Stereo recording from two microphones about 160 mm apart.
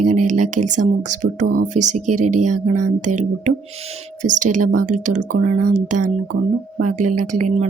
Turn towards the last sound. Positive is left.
turn(degrees=-50)  # may be behind; listen again after turning